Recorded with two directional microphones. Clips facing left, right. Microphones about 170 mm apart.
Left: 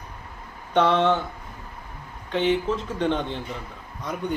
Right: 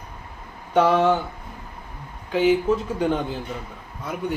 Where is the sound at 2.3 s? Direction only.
5° right (ahead or behind).